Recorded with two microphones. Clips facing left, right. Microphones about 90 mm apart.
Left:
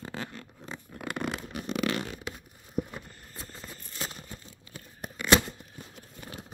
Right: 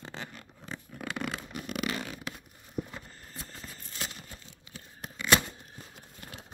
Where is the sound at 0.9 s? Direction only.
20° left (ahead or behind).